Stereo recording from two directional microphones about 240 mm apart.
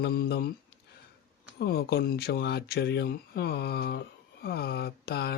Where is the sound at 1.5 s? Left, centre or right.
Left.